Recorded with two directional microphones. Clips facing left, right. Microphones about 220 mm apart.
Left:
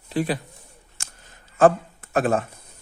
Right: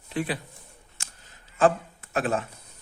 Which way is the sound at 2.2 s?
50° left (ahead or behind).